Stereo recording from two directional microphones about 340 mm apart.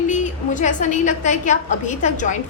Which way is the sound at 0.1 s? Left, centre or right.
Left.